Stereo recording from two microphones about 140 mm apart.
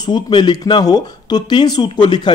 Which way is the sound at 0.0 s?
30° left (ahead or behind).